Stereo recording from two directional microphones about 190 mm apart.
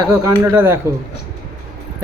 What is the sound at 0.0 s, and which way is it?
Speech, 15° right (ahead or behind).